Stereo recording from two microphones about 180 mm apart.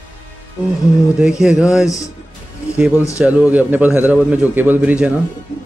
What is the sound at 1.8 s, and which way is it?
Speech, 20° left (ahead or behind).